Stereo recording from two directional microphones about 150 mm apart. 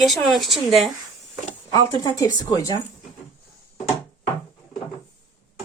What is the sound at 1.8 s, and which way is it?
Speech, 20° left (ahead or behind).